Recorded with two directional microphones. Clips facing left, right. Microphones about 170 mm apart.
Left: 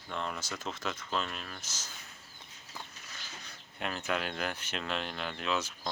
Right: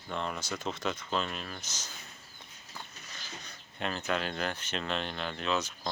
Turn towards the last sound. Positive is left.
turn(degrees=5)  # may be behind; listen again after turning